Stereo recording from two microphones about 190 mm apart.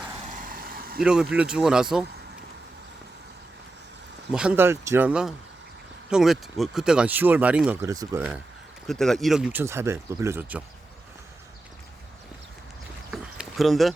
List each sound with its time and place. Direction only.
0.3 s vehicle: 45° right (ahead or behind)
1.0 s speech: 5° right (ahead or behind)
4.3 s speech: 5° right (ahead or behind)
8.9 s speech: centre (ahead or behind); by 10.6 s 15° right (ahead or behind)
13.1 s a sound: centre (ahead or behind)